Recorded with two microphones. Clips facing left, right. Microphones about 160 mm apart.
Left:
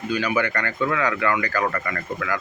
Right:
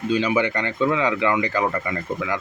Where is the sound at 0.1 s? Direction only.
25° right (ahead or behind).